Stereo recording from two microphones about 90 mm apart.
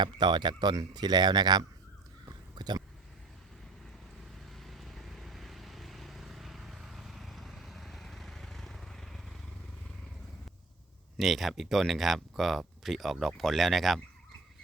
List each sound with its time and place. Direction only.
0.0 s speech: 55° right (ahead or behind)
2.2 s whispering: 50° right (ahead or behind)
4.4 s vehicle: centre (ahead or behind)
11.2 s speech: centre (ahead or behind)